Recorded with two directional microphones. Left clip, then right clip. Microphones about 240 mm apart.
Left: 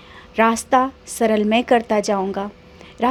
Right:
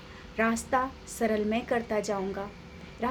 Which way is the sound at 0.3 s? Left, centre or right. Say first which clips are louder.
Left 11 dB; left.